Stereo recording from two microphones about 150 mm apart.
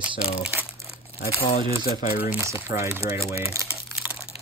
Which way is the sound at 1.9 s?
75° left (ahead or behind).